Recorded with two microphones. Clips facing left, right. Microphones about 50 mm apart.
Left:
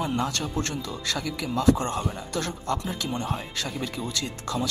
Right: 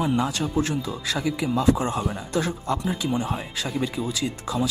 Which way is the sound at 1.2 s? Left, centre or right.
Centre.